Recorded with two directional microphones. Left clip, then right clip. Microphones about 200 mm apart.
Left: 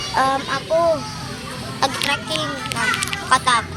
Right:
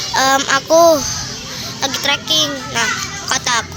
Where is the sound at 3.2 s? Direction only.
45° right (ahead or behind).